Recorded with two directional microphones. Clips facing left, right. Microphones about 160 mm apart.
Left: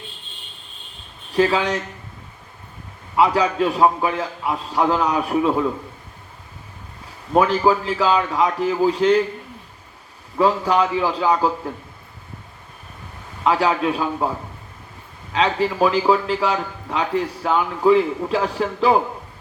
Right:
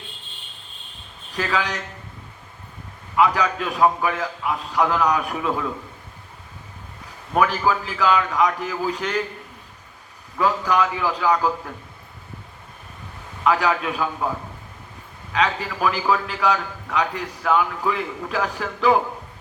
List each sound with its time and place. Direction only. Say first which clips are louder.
1.4 s a man's voice: left 7 dB; 30° left (ahead or behind)
3.2 s a man's voice: left 3 dB; 30° left (ahead or behind)
7.3 s a man's voice: left 4 dB; 30° left (ahead or behind)
10.3 s a man's voice: left 3 dB; 30° left (ahead or behind)
13.4 s a man's voice: left 2 dB; 30° left (ahead or behind)
15.3 s a man's voice: left 3 dB; 30° left (ahead or behind)